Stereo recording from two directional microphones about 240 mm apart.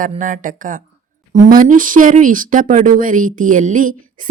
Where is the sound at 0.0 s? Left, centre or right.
Right.